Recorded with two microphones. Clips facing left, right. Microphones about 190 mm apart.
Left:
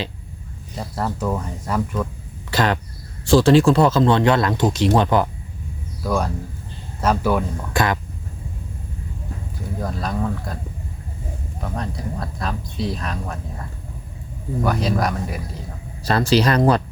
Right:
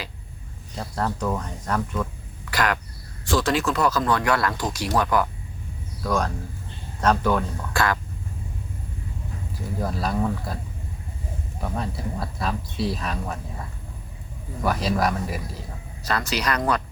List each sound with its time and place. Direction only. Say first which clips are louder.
0.8 s speech: left 2 dB; 5° left (ahead or behind)
2.5 s speech: left 4 dB; 25° left (ahead or behind)
6.0 s speech: left 2 dB; 10° left (ahead or behind)
7.7 s speech: left 3 dB; 20° left (ahead or behind)
9.8 s speech: even; 5° right (ahead or behind)
11.6 s speech: left 1 dB; centre (ahead or behind)
16.0 s speech: left 8 dB; 30° left (ahead or behind)